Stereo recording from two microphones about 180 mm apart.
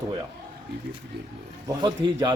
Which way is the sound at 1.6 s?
20° right (ahead or behind).